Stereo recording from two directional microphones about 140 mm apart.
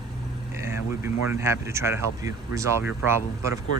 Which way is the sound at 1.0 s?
20° right (ahead or behind).